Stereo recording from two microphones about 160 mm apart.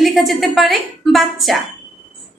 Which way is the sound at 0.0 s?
Centre (ahead or behind).